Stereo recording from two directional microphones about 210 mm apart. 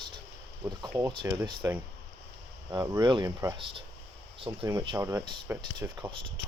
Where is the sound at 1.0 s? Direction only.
10° right (ahead or behind).